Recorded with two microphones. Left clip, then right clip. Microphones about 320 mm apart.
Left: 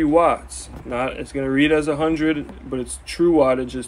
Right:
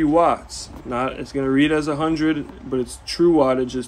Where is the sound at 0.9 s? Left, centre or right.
Right.